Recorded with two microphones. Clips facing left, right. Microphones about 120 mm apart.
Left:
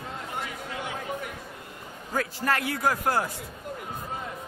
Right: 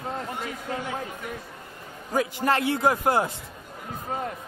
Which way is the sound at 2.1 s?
25° right (ahead or behind).